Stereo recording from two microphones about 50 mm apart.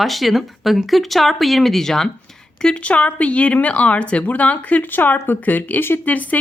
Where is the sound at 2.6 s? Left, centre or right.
Left.